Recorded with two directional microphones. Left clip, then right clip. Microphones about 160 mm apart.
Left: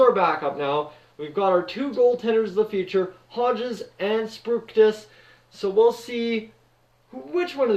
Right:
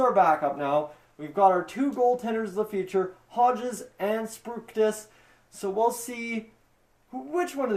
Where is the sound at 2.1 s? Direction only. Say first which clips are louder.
Left 6 dB; 45° right (ahead or behind).